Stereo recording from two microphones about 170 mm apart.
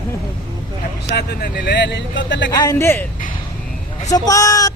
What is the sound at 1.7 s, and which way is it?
Speech, 90° left.